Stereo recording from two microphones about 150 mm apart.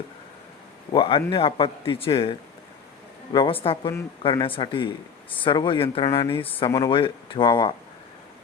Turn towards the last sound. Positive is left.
turn(degrees=35)  # may be behind; listen again after turning